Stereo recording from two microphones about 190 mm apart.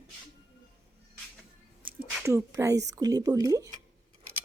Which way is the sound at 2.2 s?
15° right (ahead or behind).